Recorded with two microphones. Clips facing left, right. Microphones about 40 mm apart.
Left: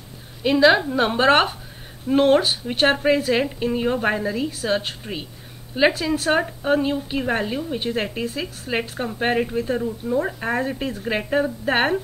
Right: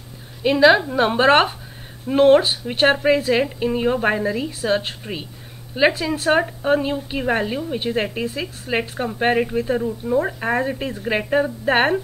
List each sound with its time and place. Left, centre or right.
0.4 s a woman's voice: centre